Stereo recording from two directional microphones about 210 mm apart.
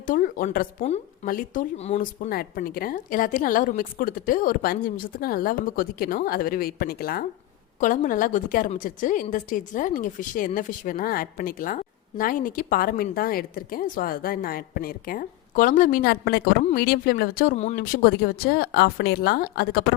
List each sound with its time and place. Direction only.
0.0 s a woman's voice: 40° left (ahead or behind)